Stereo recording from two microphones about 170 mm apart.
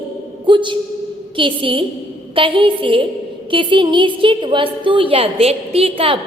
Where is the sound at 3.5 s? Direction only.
30° right (ahead or behind).